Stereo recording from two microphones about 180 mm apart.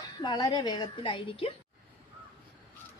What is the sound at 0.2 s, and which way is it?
A woman's voice, 20° left (ahead or behind).